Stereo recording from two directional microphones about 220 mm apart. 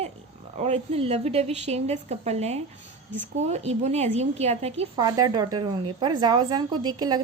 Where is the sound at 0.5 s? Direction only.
30° right (ahead or behind).